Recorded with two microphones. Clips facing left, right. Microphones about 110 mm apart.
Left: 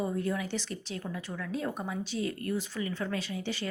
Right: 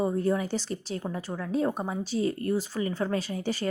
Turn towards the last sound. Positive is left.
turn(degrees=-40)  # may be behind; listen again after turning